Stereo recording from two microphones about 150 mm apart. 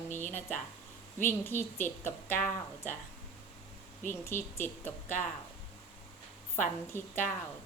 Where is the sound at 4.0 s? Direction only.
15° left (ahead or behind).